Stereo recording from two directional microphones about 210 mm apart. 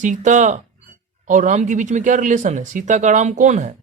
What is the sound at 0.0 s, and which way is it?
Speech, 35° right (ahead or behind).